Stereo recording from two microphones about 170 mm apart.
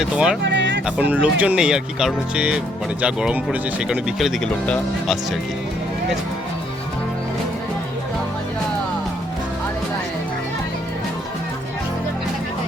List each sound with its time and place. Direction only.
0.0 s speech: 5° right (ahead or behind)
0.4 s music: 90° right
0.9 s speech: 10° right (ahead or behind)